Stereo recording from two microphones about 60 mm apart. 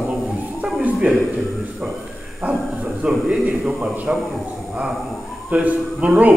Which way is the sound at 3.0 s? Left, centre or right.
Right.